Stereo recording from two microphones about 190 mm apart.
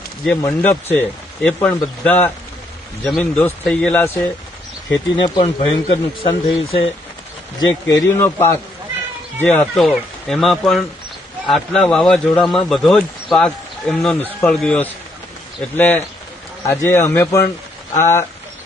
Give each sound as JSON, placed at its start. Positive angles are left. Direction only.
{"t": 0.4, "sound": "speech", "side_deg": 10}
{"t": 5.1, "sound": "speech", "side_deg": 20}